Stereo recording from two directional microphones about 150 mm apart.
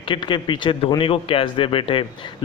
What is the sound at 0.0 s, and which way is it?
A man's voice, 35° left (ahead or behind).